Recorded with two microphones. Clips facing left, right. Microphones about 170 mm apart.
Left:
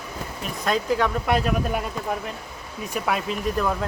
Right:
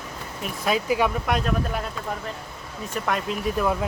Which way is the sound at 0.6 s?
10° right (ahead or behind).